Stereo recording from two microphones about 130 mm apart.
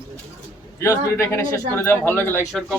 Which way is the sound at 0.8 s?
20° left (ahead or behind).